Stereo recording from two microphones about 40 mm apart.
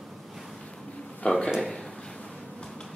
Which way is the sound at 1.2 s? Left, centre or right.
Left.